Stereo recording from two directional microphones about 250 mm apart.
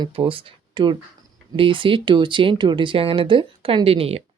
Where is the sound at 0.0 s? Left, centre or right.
Centre.